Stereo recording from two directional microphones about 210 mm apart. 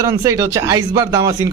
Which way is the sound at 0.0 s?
15° right (ahead or behind).